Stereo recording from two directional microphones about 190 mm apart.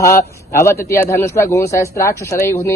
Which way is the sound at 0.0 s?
15° left (ahead or behind).